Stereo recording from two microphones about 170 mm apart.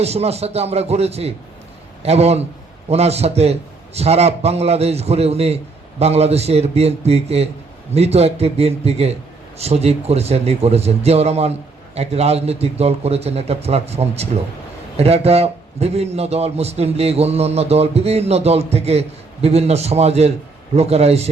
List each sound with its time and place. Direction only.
0.0 s a man's voice: 40° right (ahead or behind)